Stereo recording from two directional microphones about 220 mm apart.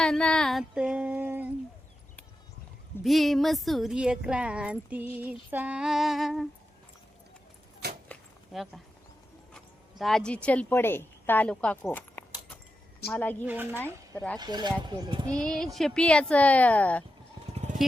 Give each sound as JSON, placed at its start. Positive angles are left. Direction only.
{"t": 0.0, "sound": "female singing", "side_deg": 5}
{"t": 3.0, "sound": "speech", "side_deg": 0}
{"t": 8.0, "sound": "a sound", "side_deg": 0}
{"t": 10.0, "sound": "a woman's voice", "side_deg": 0}
{"t": 13.4, "sound": "speech", "side_deg": -5}
{"t": 14.3, "sound": "speech", "side_deg": -20}
{"t": 15.3, "sound": "speech", "side_deg": 5}
{"t": 17.5, "sound": "sheep", "side_deg": -30}